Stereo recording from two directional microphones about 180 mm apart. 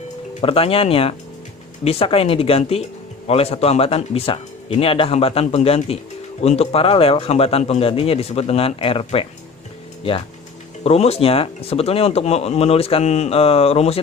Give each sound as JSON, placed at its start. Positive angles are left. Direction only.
{"t": 0.4, "sound": "speech", "side_deg": 30}